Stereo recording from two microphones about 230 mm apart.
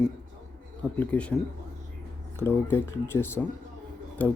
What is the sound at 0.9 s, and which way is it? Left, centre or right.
Speech, centre.